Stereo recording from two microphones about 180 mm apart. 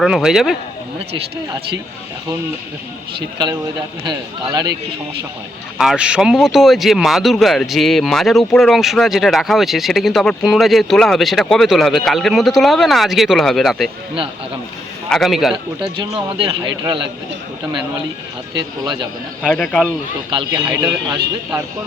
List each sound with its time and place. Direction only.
0.0 s speech: centre (ahead or behind)
3.2 s speech: 25° right (ahead or behind)
5.7 s speech: centre (ahead or behind)
15.1 s speech: centre (ahead or behind)
15.5 s speech: 30° right (ahead or behind)
18.5 s speech: 25° right (ahead or behind)
19.4 s speech: centre (ahead or behind)
20.3 s speech: 25° right (ahead or behind)